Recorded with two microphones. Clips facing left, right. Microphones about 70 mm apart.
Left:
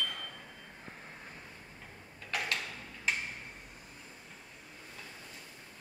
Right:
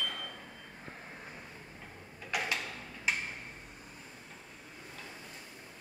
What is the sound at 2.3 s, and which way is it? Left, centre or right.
Tick-tock, centre.